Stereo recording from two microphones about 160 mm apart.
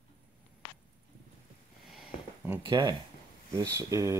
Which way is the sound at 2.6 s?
25° right (ahead or behind).